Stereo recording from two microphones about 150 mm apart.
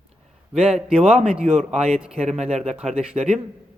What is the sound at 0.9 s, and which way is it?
Speech, 5° right (ahead or behind).